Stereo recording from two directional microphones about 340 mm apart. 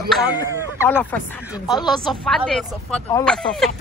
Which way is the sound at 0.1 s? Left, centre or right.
Centre.